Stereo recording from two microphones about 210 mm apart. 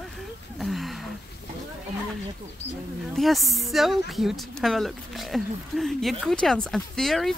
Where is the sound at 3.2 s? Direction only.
Centre (ahead or behind).